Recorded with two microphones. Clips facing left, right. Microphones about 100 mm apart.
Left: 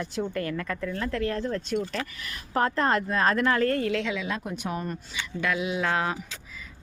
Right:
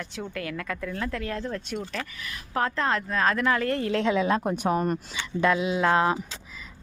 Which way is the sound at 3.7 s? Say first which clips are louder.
Right 2 dB; 25° right (ahead or behind).